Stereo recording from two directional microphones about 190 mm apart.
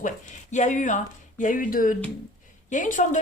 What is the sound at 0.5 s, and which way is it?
A woman's voice, 40° left (ahead or behind).